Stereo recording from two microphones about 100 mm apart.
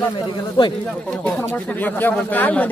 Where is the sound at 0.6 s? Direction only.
50° left (ahead or behind).